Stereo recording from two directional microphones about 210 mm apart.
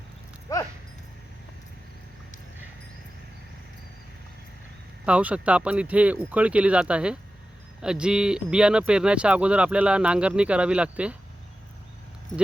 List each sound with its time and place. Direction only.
0.5 s speech: 15° left (ahead or behind)
5.0 s speech: 5° right (ahead or behind)